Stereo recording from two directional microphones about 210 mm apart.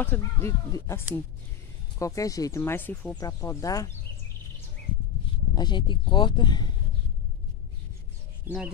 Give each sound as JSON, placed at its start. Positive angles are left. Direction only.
{"t": 0.0, "sound": "speech", "side_deg": 10}
{"t": 5.5, "sound": "speech", "side_deg": 20}
{"t": 8.5, "sound": "speech", "side_deg": -10}